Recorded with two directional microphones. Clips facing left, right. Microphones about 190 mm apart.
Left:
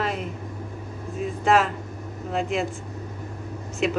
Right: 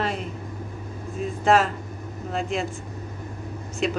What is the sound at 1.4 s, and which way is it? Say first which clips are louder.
Speech: right 1 dB; centre (ahead or behind).